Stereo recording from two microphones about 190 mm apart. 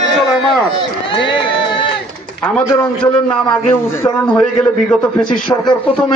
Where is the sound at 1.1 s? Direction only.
25° left (ahead or behind).